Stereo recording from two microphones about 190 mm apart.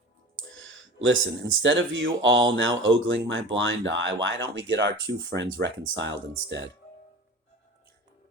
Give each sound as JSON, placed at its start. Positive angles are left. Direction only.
{"t": 0.5, "sound": "speech", "side_deg": -90}